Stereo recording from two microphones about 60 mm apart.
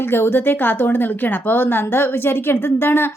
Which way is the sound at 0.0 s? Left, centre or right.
Left.